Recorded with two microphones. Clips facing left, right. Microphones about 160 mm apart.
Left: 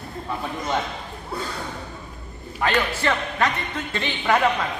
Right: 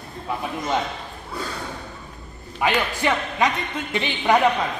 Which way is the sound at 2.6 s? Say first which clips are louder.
Right 1 dB; 15° right (ahead or behind).